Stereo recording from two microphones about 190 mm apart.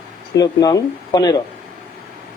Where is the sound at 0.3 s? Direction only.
20° left (ahead or behind).